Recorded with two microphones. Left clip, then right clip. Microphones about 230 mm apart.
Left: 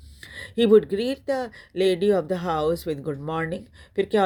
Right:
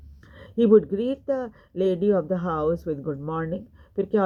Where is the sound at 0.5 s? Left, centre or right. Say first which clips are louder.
Left 1 dB; left.